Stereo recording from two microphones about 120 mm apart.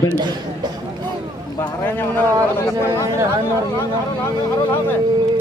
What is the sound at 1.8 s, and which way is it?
A man's voice, 20° left (ahead or behind).